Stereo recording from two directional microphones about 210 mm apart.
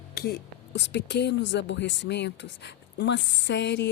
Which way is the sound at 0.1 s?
45° left (ahead or behind).